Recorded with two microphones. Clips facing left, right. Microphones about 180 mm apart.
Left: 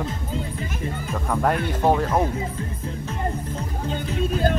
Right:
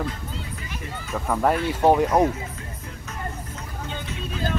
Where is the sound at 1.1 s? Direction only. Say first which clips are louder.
Right 1 dB; centre (ahead or behind).